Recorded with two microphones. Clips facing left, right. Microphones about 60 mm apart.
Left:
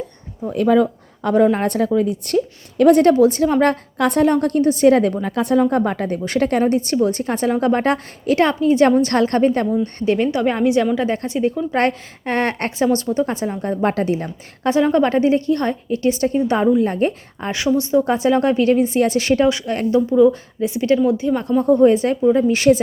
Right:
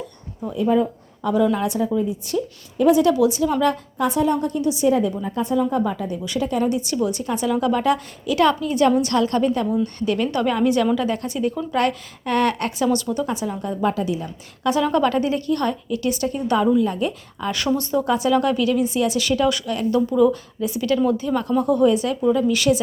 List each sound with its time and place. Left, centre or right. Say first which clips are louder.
0.5 s speech: left 4 dB; left
1.3 s a woman's voice: left 4 dB; left
6.7 s a woman's voice: left 5 dB; left
9.8 s a woman's voice: left 4 dB; left
14.7 s a woman's voice: left 3 dB; left
20.1 s a woman's voice: left 4 dB; centre